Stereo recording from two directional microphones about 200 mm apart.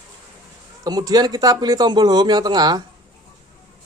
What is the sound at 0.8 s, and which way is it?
Speech, 20° right (ahead or behind).